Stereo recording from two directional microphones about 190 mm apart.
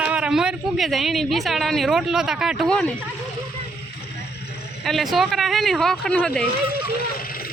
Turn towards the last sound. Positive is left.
turn(degrees=55)  # may be behind; listen again after turning